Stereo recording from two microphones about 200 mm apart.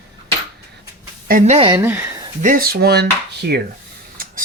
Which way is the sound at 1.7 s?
10° right (ahead or behind).